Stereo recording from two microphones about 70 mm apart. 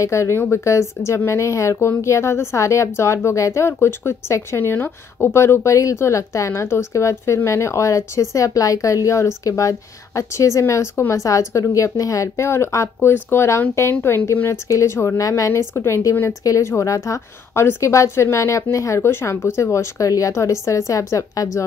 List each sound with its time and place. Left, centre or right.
0.0 s speech: left
15.7 s speech: left
19.0 s speech: left